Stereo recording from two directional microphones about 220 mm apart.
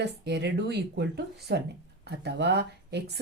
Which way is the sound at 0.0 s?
50° right (ahead or behind).